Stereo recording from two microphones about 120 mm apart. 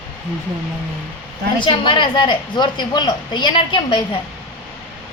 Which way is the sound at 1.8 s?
45° left (ahead or behind).